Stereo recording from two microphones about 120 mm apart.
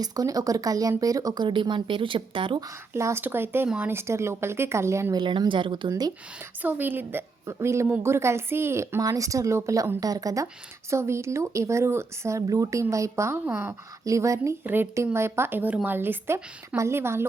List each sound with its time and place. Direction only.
0.0 s speech: 30° right (ahead or behind)
1.5 s speech: 45° right (ahead or behind)
2.9 s a woman's voice: 20° right (ahead or behind)
5.1 s speech: 40° right (ahead or behind)
5.9 s speech: 30° right (ahead or behind)
6.6 s a woman's voice: 15° right (ahead or behind)